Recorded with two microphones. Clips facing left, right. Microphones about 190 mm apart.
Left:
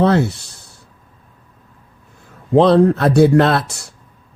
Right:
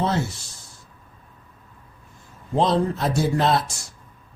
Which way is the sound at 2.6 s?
65° left (ahead or behind).